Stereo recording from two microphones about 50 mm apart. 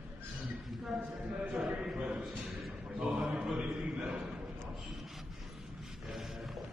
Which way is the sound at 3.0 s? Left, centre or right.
Right.